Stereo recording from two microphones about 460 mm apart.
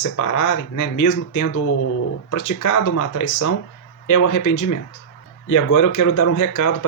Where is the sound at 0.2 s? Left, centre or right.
Left.